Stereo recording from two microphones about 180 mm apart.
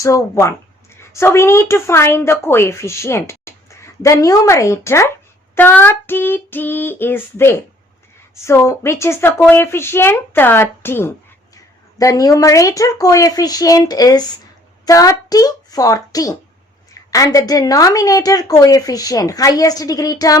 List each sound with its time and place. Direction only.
0.0 s a woman's voice: 15° left (ahead or behind)